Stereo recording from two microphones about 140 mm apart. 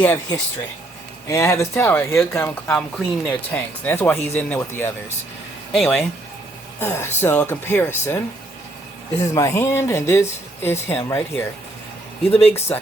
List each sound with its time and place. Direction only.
0.0 s speech: 10° left (ahead or behind)
1.3 s speech: 20° left (ahead or behind); by 6.1 s 5° left (ahead or behind)
6.7 s speech: 15° left (ahead or behind)
9.2 s speech: 25° left (ahead or behind)
12.3 s speech: 45° left (ahead or behind)
12.5 s speech: 15° left (ahead or behind)